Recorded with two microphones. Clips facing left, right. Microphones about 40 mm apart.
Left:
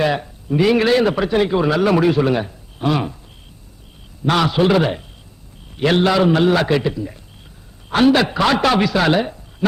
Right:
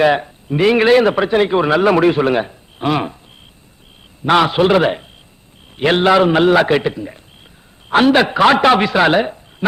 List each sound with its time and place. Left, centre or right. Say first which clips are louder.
0.0 s a man's voice: right 5 dB; right
4.3 s a man's voice: right 3 dB; right